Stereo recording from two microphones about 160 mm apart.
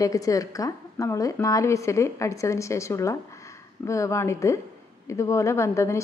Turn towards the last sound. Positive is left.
turn(degrees=20)  # may be behind; listen again after turning